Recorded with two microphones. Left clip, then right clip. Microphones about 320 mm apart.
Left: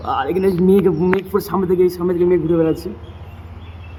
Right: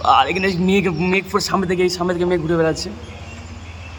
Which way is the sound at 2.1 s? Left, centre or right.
Centre.